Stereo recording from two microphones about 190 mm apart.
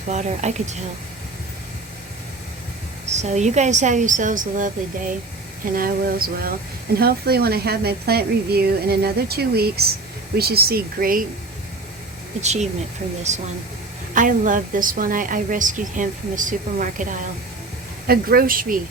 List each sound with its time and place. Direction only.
0.1 s a woman's voice: 35° right (ahead or behind)
3.1 s a woman's voice: 35° right (ahead or behind)
5.7 s a woman's voice: 50° right (ahead or behind)
12.4 s a woman's voice: 35° right (ahead or behind)